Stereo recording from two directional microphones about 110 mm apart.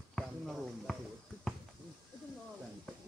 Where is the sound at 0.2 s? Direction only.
5° right (ahead or behind).